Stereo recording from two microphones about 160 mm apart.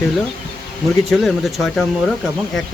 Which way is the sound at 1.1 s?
Centre (ahead or behind).